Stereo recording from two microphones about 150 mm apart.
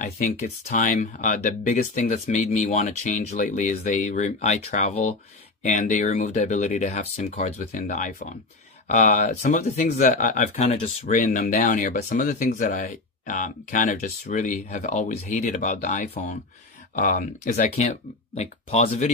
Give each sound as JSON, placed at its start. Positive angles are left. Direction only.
{"t": 0.7, "sound": "speech", "side_deg": 60}
{"t": 8.8, "sound": "speech", "side_deg": 55}
{"t": 10.5, "sound": "speech", "side_deg": 40}
{"t": 11.1, "sound": "speech", "side_deg": 60}